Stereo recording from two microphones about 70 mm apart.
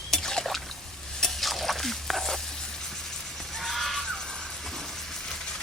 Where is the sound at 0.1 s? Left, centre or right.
Centre.